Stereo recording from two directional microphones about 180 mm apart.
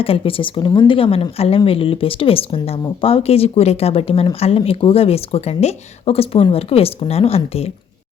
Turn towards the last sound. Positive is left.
turn(degrees=35)  # may be behind; listen again after turning